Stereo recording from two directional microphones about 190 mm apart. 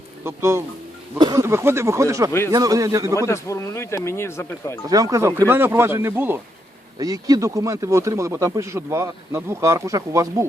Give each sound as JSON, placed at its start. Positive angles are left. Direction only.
{"t": 0.3, "sound": "speech", "side_deg": -15}
{"t": 3.2, "sound": "speech", "side_deg": 15}
{"t": 4.9, "sound": "speech", "side_deg": -20}